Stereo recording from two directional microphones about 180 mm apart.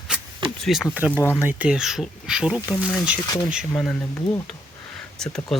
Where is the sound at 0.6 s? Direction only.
Centre (ahead or behind).